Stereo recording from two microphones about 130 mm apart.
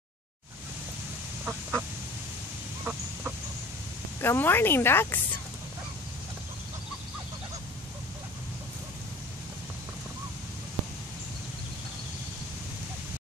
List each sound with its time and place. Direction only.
1.4 s duck: 10° right (ahead or behind)
2.8 s chicken: 10° right (ahead or behind)
4.2 s speech: 15° left (ahead or behind)